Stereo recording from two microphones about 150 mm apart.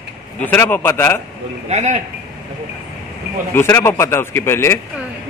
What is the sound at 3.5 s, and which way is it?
Speech, 15° left (ahead or behind).